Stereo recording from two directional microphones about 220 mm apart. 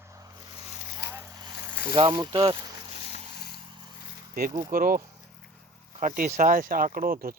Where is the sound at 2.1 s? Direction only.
15° right (ahead or behind).